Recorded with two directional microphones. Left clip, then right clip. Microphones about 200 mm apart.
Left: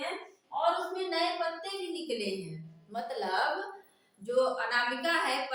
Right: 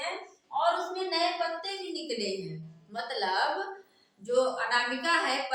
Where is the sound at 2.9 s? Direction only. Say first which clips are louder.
Right 1 dB; 10° left (ahead or behind).